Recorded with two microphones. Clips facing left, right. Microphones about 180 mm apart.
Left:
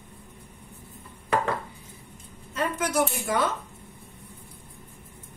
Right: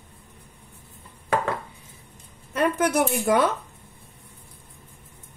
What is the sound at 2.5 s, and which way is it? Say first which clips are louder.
Speech: right 5 dB; 60° right (ahead or behind).